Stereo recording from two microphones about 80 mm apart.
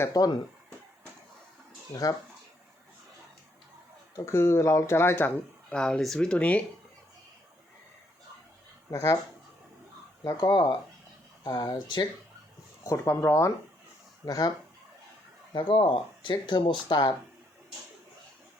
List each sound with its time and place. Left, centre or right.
0.1 s speech: left
4.3 s speech: left
5.6 s speech: centre
8.9 s speech: left
10.2 s speech: left
12.8 s speech: left
14.3 s speech: left
15.5 s speech: left